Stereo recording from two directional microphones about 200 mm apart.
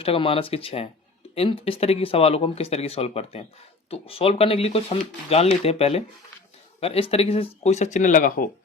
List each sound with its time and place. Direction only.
0.0 s speech: 30° left (ahead or behind); by 8.4 s 45° left (ahead or behind)